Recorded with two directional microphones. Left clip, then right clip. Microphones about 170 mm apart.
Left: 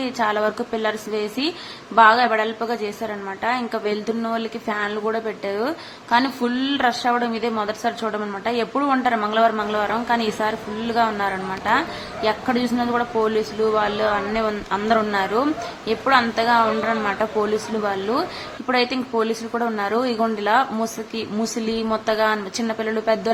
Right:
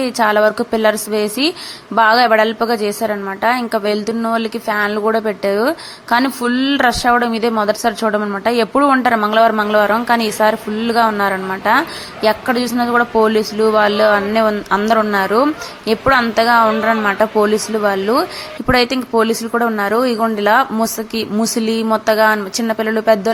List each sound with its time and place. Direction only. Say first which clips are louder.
0.0 s a woman's voice: right 8 dB; 35° right (ahead or behind)